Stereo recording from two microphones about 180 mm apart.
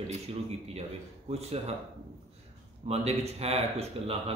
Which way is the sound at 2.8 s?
35° right (ahead or behind).